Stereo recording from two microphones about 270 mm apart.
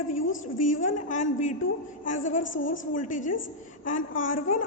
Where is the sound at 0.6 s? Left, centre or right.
Left.